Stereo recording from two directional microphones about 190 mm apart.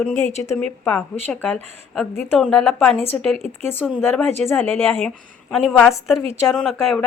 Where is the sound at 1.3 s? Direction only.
Centre (ahead or behind).